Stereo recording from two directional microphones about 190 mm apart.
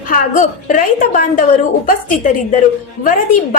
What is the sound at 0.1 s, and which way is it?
A woman's voice, 45° left (ahead or behind).